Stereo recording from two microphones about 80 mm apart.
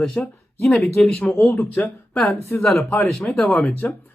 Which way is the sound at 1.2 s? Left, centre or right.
Left.